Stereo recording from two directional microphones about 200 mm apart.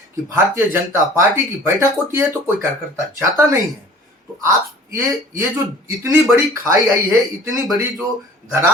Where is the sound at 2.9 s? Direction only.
15° right (ahead or behind).